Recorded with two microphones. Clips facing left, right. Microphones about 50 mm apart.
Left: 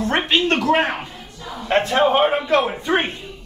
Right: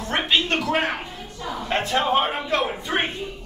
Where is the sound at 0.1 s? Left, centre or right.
Left.